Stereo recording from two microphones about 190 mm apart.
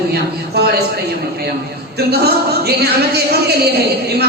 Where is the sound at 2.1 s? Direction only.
55° right (ahead or behind).